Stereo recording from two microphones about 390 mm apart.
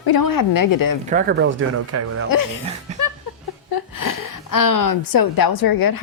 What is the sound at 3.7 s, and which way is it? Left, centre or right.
A woman's voice, left.